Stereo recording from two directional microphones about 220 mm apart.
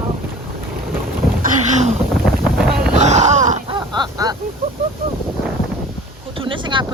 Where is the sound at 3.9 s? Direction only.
20° right (ahead or behind).